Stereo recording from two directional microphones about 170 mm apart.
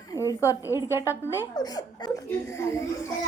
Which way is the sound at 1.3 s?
20° left (ahead or behind).